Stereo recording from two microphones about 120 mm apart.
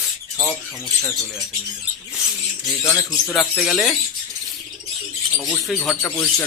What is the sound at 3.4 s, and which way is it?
Speech, centre (ahead or behind).